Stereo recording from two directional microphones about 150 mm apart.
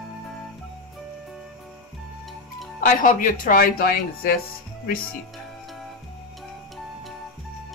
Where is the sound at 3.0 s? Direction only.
60° left (ahead or behind).